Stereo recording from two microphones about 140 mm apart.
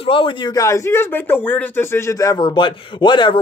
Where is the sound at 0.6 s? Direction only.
20° left (ahead or behind).